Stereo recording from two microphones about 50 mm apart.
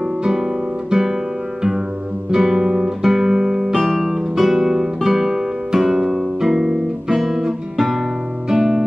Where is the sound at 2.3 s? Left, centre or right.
Centre.